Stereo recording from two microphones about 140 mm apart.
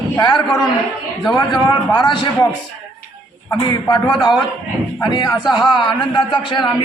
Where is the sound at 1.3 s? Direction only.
30° left (ahead or behind).